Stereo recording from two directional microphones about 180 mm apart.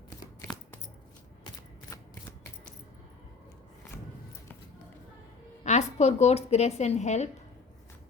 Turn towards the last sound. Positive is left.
turn(degrees=40)  # may be behind; listen again after turning